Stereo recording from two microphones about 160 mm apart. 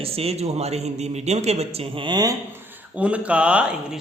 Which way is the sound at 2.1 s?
25° right (ahead or behind).